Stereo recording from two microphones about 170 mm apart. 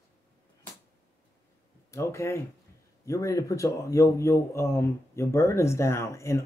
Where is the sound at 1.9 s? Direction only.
15° left (ahead or behind).